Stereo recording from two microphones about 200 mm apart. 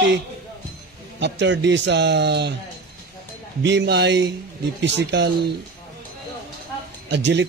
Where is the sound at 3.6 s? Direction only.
60° right (ahead or behind).